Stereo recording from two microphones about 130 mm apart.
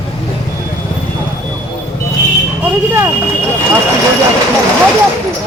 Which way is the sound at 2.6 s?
20° right (ahead or behind).